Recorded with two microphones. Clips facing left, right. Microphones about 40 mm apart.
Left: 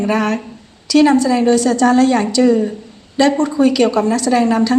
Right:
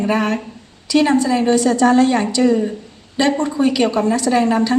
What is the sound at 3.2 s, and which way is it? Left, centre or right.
A woman's voice, right.